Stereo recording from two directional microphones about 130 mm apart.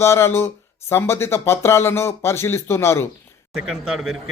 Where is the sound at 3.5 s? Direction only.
5° right (ahead or behind).